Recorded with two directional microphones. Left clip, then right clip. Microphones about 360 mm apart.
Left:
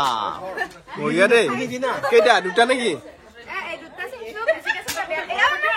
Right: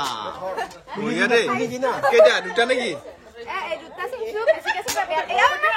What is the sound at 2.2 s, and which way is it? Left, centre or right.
Speech, centre.